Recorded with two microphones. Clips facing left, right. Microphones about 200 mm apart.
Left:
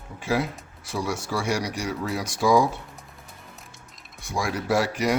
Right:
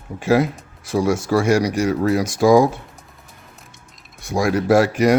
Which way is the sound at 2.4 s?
90° right.